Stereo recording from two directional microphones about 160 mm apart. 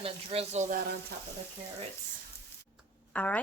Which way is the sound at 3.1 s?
10° left (ahead or behind).